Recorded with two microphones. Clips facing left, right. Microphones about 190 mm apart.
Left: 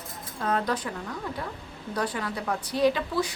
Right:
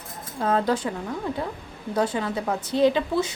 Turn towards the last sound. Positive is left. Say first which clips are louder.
# right 3 dB
turn(degrees=-25)  # may be behind; listen again after turning